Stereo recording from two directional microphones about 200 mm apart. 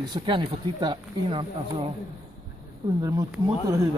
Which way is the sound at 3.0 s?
15° right (ahead or behind).